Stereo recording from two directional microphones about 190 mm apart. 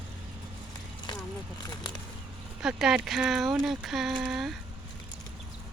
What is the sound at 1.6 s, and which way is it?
Speech, 25° left (ahead or behind).